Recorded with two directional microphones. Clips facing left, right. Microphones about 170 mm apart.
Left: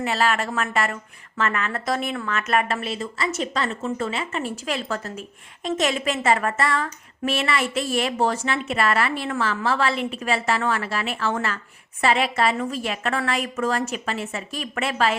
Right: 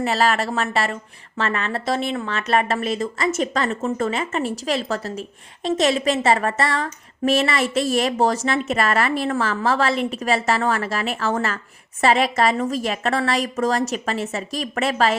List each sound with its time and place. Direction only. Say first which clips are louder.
0.0 s speech: right 3 dB; 40° right (ahead or behind)